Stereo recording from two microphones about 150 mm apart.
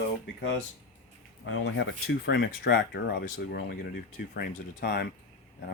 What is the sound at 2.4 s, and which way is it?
Speech, 90° left.